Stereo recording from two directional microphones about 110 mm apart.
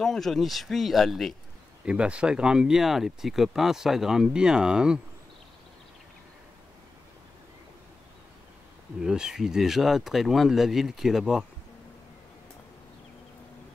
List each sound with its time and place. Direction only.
0.0 s speech: 5° left (ahead or behind)
1.9 s speech: 10° right (ahead or behind)
9.0 s speech: 5° right (ahead or behind)